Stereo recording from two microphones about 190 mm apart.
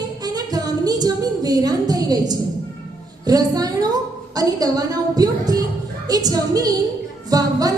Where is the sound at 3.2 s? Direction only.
20° right (ahead or behind).